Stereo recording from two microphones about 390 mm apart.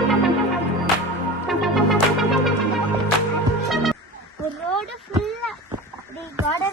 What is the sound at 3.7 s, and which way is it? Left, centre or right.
Music, centre.